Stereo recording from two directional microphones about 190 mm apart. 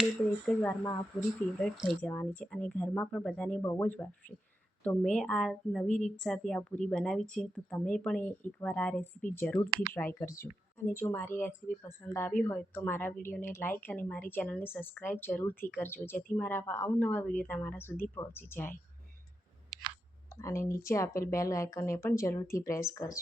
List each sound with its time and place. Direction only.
0.0 s speech: 5° left (ahead or behind)
9.6 s speech: 20° right (ahead or behind)
9.9 s speech: 10° left (ahead or behind)
20.3 s speech: 15° left (ahead or behind)